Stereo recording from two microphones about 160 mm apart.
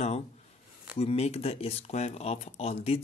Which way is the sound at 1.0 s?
40° left (ahead or behind).